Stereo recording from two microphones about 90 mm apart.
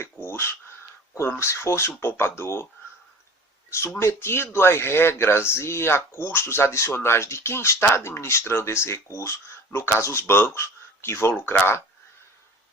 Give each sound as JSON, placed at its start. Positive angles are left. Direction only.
{"t": 0.0, "sound": "a sound", "side_deg": 25}
{"t": 1.4, "sound": "speech", "side_deg": 30}
{"t": 3.7, "sound": "speech", "side_deg": 30}